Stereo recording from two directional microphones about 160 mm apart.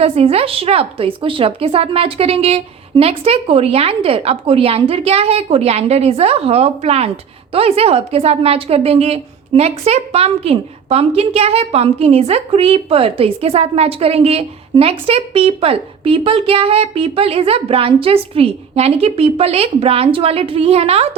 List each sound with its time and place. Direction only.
0.0 s a woman's voice: 40° right (ahead or behind)